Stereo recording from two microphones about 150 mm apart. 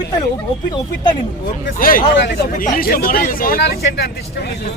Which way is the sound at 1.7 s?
70° left (ahead or behind).